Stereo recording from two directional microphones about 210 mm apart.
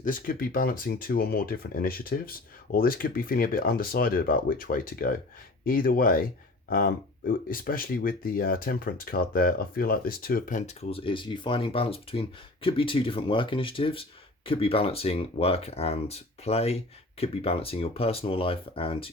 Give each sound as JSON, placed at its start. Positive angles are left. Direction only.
{"t": 0.0, "sound": "speech", "side_deg": 40}